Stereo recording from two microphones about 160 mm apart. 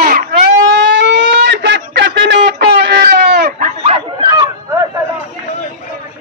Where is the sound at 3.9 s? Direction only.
30° right (ahead or behind).